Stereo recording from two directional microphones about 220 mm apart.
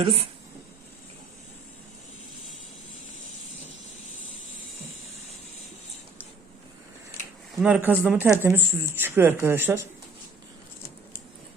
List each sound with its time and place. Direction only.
0.0 s speech: 25° right (ahead or behind)
7.6 s speech: 5° right (ahead or behind)